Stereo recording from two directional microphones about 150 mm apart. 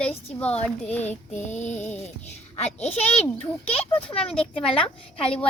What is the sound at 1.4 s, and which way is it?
Female singing, 50° left (ahead or behind).